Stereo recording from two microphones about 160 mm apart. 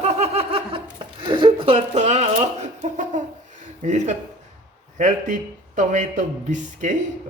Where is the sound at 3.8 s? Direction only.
45° right (ahead or behind).